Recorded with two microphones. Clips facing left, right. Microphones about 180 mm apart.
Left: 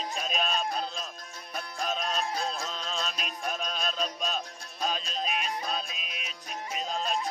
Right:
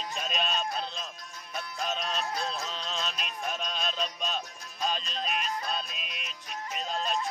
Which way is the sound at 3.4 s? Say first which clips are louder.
Left 1 dB; 5° left (ahead or behind).